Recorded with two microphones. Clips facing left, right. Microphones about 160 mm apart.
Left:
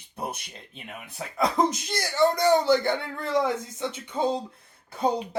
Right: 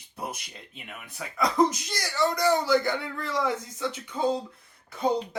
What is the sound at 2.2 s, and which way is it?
Speech, 25° left (ahead or behind).